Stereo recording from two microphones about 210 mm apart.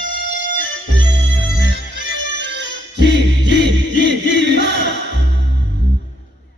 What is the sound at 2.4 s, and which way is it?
Music, 55° right (ahead or behind).